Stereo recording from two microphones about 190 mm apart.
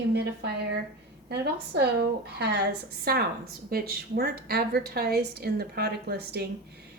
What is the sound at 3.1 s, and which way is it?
A woman's voice, 55° right (ahead or behind).